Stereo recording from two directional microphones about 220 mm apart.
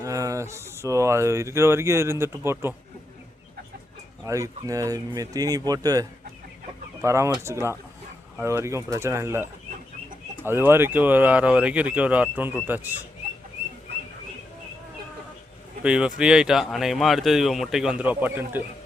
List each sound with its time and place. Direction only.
0.0 s speech: 15° right (ahead or behind)
4.2 s speech: 15° right (ahead or behind)
15.8 s speech: 5° right (ahead or behind)